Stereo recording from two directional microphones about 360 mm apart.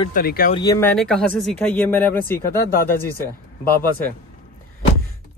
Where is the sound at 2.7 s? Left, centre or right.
Left.